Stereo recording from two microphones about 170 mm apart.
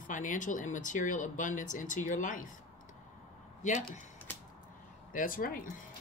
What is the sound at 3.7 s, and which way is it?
Speech, 50° left (ahead or behind).